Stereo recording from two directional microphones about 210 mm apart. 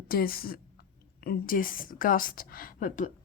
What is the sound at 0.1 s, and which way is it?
Speech, 45° left (ahead or behind).